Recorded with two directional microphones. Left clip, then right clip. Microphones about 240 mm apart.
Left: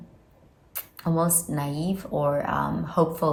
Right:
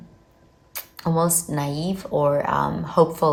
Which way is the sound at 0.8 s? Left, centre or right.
Right.